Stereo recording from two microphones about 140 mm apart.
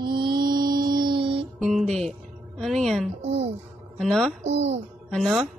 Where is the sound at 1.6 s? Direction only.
Centre (ahead or behind).